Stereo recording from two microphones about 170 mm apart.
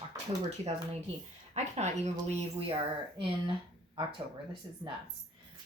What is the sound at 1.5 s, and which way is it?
Speech, 40° right (ahead or behind).